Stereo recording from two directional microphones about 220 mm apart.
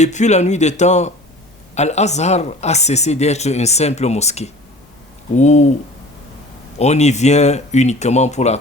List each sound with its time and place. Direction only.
0.0 s speech: 30° left (ahead or behind)
6.7 s speech: 30° left (ahead or behind)